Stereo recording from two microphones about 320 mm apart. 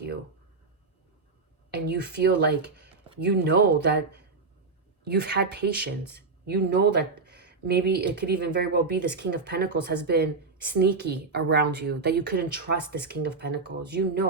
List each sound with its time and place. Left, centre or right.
1.7 s speech: right